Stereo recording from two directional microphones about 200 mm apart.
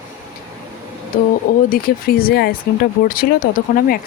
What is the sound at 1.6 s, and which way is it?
Speech, 45° left (ahead or behind).